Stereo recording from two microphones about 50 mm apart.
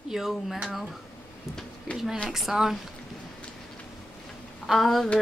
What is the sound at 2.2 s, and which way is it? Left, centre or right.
Speech, centre.